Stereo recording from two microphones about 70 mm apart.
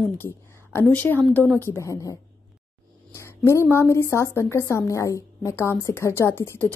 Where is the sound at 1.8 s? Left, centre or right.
Left.